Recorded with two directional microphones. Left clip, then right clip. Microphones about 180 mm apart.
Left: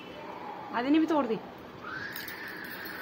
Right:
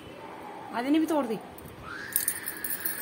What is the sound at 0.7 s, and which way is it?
Speech, 25° right (ahead or behind).